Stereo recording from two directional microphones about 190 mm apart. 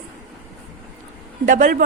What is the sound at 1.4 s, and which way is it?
Speech, 45° right (ahead or behind).